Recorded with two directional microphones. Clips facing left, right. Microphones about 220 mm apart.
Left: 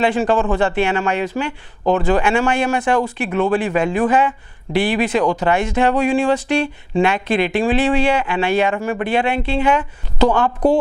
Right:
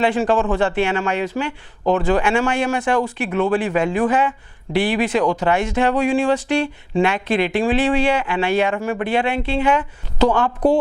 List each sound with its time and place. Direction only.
0.0 s speech: 15° left (ahead or behind)
1.8 s speech: 25° left (ahead or behind)
5.2 s speech: 25° left (ahead or behind)
10.2 s speech: 30° left (ahead or behind)